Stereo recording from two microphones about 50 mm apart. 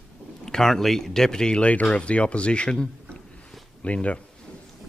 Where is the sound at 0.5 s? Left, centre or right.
Centre; by 4.2 s left.